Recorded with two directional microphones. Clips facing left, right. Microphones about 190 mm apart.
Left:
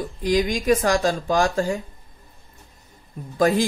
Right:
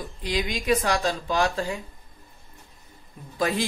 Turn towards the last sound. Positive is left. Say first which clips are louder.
# left 7 dB
turn(degrees=45)  # may be behind; listen again after turning